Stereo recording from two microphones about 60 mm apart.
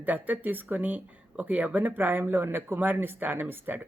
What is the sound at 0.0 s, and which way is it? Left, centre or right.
Speech, right.